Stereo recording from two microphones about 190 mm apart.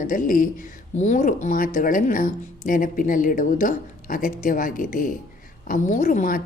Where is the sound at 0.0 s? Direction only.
45° left (ahead or behind).